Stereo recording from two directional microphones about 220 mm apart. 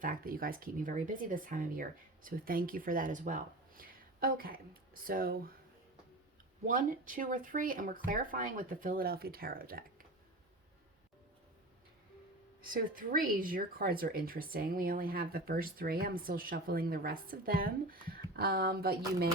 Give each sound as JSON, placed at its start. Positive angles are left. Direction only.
{"t": 0.0, "sound": "speech", "side_deg": -40}
{"t": 6.7, "sound": "speech", "side_deg": -40}
{"t": 12.6, "sound": "speech", "side_deg": -40}